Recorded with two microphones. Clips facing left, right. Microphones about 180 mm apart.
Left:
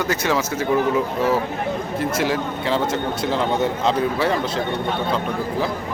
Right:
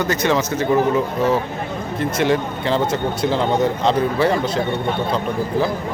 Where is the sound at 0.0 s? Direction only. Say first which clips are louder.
Right 3 dB; 5° left (ahead or behind).